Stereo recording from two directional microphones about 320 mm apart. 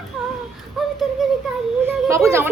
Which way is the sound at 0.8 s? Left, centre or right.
Centre.